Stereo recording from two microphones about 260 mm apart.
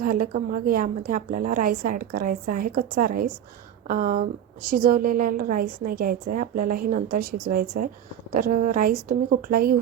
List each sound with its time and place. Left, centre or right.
0.0 s a woman's voice: right